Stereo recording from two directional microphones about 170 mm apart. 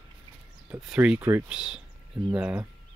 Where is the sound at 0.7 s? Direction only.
5° right (ahead or behind).